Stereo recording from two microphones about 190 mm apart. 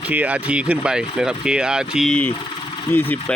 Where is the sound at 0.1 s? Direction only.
5° right (ahead or behind).